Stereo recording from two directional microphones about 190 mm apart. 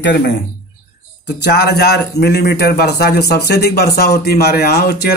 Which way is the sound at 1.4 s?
60° left (ahead or behind).